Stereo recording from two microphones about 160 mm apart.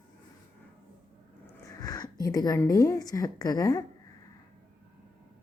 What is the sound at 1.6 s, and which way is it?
Speech, 25° left (ahead or behind).